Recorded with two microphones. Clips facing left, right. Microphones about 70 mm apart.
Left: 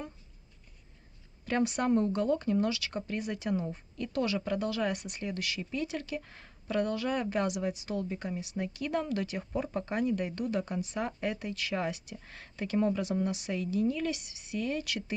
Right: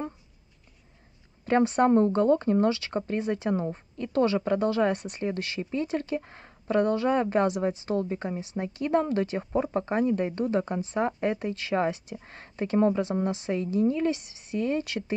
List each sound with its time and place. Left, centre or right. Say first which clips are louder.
1.4 s speech: right 8 dB; right